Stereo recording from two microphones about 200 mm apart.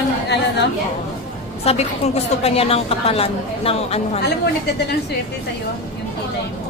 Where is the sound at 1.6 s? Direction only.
30° left (ahead or behind).